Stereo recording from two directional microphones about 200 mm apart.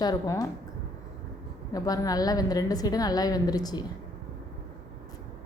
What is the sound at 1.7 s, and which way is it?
A woman's voice, 20° left (ahead or behind).